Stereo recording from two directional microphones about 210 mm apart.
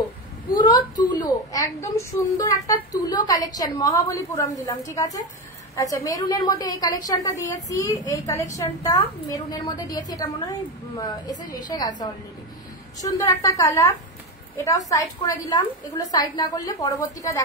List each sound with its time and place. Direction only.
0.9 s a woman's voice: 15° left (ahead or behind)
13.0 s a woman's voice: 15° left (ahead or behind)